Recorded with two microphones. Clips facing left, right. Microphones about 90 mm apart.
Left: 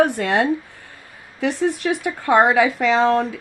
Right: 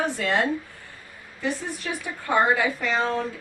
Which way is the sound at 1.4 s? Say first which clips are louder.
Left 9 dB; 75° left (ahead or behind).